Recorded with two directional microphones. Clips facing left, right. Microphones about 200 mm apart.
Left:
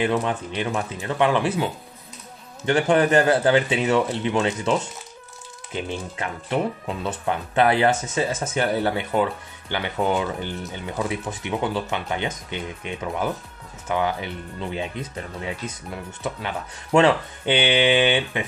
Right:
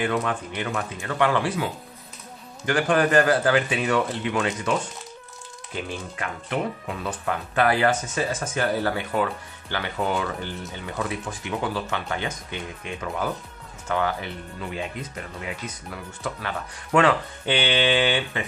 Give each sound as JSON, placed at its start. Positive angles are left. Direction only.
{"t": 0.0, "sound": "speech", "side_deg": 25}